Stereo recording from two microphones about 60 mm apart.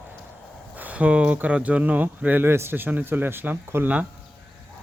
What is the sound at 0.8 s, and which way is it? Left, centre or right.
Speech, right.